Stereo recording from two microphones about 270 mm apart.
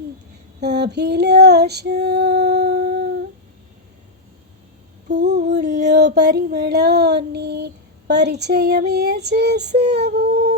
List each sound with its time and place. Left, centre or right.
0.6 s female singing: right
5.2 s a sound: right
9.9 s female singing: right